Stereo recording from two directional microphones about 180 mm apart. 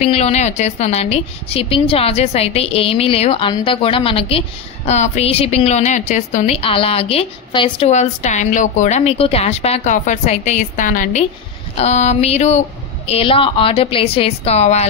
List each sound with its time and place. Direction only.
0.0 s a woman's voice: 40° left (ahead or behind)
7.9 s a woman's voice: 40° left (ahead or behind)